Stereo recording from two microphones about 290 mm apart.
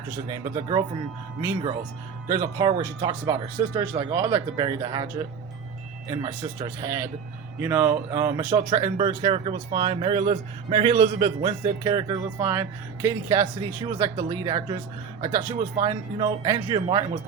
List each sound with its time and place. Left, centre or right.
0.3 s speech: centre
2.3 s speech: centre
6.1 s speech: centre